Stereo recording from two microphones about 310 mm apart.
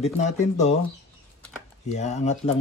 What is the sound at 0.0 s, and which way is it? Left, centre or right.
Speech, left.